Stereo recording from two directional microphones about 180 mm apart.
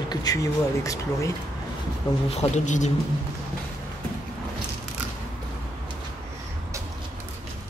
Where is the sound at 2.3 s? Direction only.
40° left (ahead or behind).